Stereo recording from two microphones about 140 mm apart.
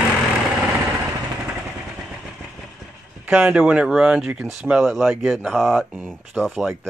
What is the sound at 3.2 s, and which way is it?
Speech, 15° right (ahead or behind).